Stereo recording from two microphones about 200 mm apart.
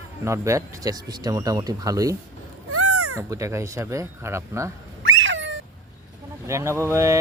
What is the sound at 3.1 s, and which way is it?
Speech, 15° right (ahead or behind).